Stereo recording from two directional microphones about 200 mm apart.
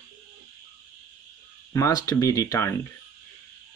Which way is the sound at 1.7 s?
15° left (ahead or behind).